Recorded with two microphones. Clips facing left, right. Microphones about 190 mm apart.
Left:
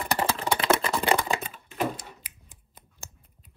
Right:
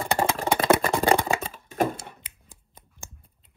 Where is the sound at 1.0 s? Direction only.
35° right (ahead or behind).